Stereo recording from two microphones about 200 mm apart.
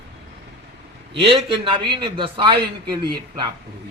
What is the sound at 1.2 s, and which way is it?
Speech, 25° right (ahead or behind).